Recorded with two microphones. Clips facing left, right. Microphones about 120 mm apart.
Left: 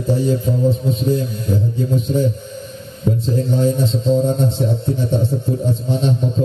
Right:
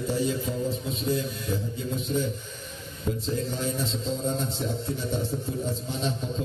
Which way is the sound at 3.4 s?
30° left (ahead or behind).